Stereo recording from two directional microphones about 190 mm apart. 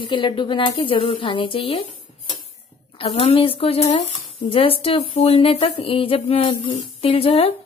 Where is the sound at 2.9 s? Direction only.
30° left (ahead or behind).